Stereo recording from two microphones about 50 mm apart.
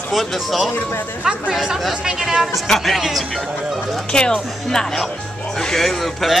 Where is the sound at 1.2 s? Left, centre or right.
Centre.